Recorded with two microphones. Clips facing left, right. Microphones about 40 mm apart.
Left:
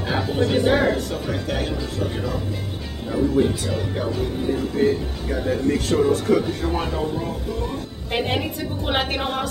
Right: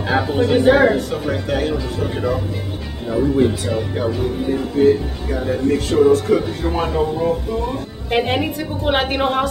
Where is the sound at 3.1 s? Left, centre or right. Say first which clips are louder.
Right 3 dB; centre.